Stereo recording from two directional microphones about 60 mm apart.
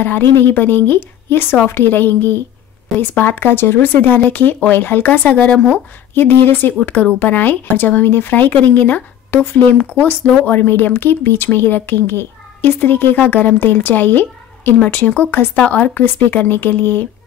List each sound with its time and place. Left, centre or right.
0.0 s a woman's voice: left